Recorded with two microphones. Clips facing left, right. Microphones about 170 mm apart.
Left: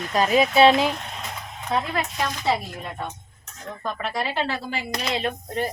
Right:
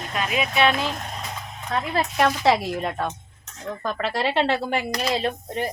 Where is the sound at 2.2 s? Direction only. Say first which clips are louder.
Right 7 dB; 70° right (ahead or behind).